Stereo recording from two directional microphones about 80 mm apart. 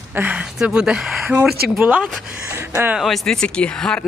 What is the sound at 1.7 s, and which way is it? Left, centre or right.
Speech, right.